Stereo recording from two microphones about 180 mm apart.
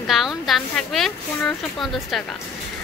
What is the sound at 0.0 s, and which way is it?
Speech, centre (ahead or behind).